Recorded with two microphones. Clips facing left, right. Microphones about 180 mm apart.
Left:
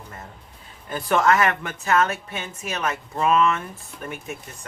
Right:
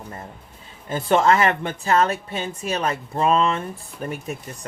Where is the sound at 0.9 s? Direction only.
25° right (ahead or behind).